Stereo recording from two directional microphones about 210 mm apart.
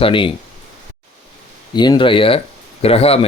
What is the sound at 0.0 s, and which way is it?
Speech, 25° left (ahead or behind).